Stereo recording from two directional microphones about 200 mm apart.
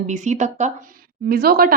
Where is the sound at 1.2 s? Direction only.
50° right (ahead or behind).